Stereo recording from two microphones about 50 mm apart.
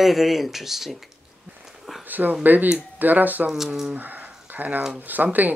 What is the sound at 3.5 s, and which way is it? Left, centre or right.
Speech, centre.